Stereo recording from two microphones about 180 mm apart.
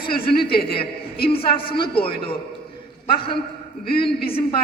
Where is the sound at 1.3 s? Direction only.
30° left (ahead or behind).